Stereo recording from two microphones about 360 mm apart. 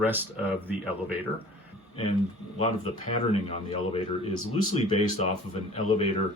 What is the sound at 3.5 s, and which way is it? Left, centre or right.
Speech, centre.